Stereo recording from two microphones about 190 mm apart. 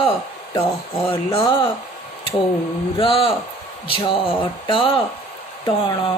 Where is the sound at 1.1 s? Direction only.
25° left (ahead or behind).